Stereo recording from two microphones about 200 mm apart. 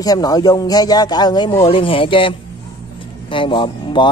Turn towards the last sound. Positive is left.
turn(degrees=25)  # may be behind; listen again after turning